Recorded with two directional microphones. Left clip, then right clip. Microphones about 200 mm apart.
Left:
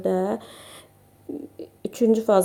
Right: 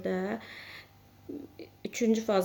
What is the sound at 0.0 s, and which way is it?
A woman's voice, 15° left (ahead or behind).